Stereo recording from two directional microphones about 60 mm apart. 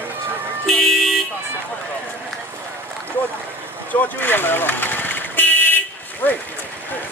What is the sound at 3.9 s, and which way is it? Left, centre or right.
Vehicle, left.